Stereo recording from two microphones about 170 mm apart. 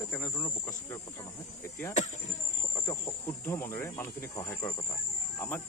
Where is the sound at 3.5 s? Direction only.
15° left (ahead or behind).